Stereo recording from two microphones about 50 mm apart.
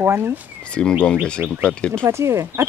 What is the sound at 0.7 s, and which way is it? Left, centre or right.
Speech, centre.